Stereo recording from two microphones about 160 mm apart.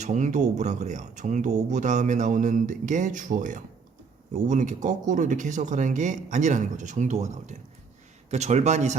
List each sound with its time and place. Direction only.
0.0 s speech: 50° right (ahead or behind)